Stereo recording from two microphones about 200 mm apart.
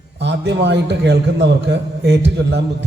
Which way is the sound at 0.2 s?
60° right (ahead or behind).